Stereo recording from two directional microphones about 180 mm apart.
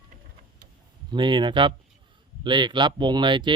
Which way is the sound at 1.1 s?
25° right (ahead or behind).